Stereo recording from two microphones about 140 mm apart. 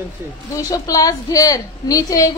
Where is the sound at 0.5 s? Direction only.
25° left (ahead or behind).